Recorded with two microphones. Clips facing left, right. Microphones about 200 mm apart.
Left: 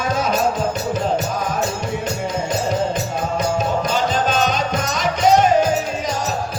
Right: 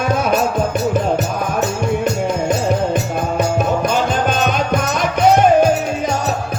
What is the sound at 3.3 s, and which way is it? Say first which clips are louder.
Music: right 3 dB; 55° right (ahead or behind).